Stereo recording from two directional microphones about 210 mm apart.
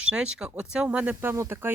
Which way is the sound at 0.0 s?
5° right (ahead or behind).